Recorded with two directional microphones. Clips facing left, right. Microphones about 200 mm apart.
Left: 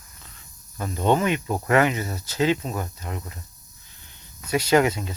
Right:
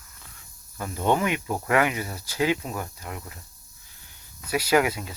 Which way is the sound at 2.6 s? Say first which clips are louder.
Left 3 dB; 20° left (ahead or behind).